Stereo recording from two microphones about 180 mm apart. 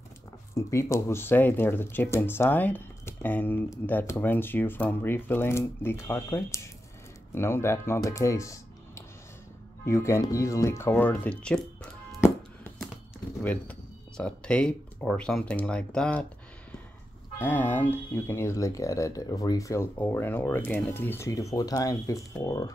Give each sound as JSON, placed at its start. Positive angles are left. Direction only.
{"t": 0.6, "sound": "speech", "side_deg": 15}
{"t": 17.4, "sound": "speech", "side_deg": 10}